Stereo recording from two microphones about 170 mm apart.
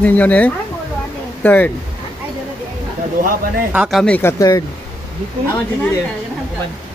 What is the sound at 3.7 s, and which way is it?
Speech, 5° right (ahead or behind).